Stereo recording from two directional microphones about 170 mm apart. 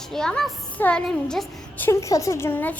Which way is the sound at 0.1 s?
5° left (ahead or behind).